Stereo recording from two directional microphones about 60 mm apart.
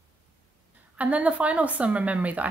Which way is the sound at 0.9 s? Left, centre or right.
Right.